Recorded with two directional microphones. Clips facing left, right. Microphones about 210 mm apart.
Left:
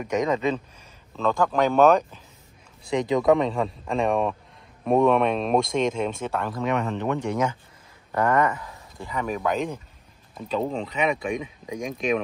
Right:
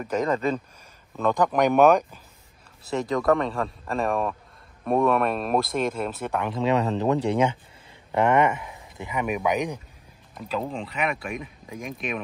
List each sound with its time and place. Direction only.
0.0 s speech: 10° left (ahead or behind)
1.1 s speech: 15° right (ahead or behind)
2.8 s speech: 5° right (ahead or behind)
6.5 s speech: 30° right (ahead or behind); by 9.8 s 15° right (ahead or behind)
10.3 s speech: centre (ahead or behind)